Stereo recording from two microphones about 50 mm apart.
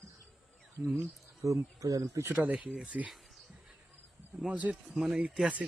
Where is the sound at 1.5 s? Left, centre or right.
Right.